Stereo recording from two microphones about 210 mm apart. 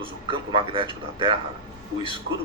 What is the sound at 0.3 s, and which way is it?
Speech, 25° right (ahead or behind).